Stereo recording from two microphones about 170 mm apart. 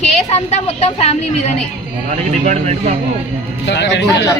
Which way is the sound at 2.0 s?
45° right (ahead or behind).